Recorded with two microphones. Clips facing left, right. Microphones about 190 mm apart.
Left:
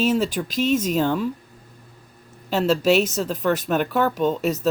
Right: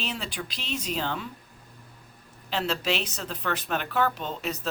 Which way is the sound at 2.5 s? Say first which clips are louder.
Left 10 dB; 45° left (ahead or behind).